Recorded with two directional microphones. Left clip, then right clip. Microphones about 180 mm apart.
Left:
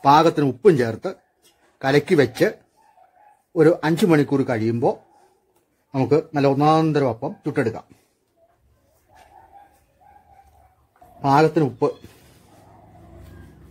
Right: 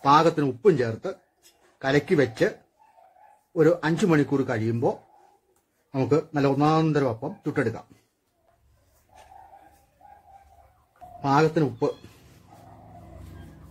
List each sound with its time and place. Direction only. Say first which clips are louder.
0.0 s speech: left 4 dB; 45° left (ahead or behind)
3.5 s a man's voice: left 4 dB; 45° left (ahead or behind)
11.1 s speech: left 5 dB; 45° left (ahead or behind)